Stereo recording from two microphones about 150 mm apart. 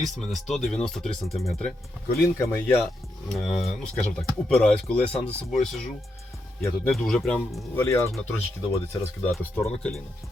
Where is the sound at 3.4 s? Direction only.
50° left (ahead or behind).